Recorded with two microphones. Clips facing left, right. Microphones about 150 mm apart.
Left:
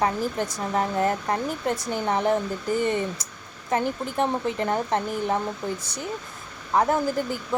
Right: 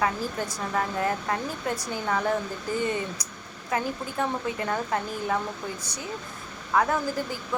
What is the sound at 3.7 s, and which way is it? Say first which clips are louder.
Speech: left 4 dB; 30° left (ahead or behind).